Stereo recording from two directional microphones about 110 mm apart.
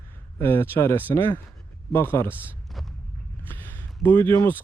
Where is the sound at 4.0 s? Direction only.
20° left (ahead or behind).